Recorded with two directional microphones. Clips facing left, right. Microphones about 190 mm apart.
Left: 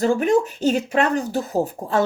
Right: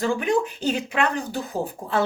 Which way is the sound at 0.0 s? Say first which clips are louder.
Left 4 dB; 40° left (ahead or behind).